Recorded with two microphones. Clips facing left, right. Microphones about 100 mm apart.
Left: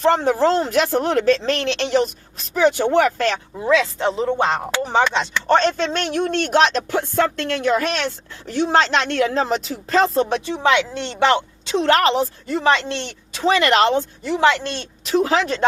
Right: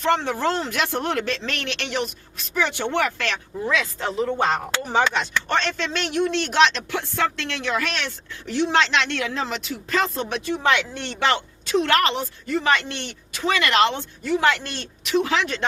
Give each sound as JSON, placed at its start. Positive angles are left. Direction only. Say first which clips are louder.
{"t": 0.0, "sound": "speech", "louder": "left 5 dB", "side_deg": 40}
{"t": 3.6, "sound": "speech", "louder": "left 7 dB", "side_deg": 25}
{"t": 5.5, "sound": "speech", "louder": "left 7 dB", "side_deg": 40}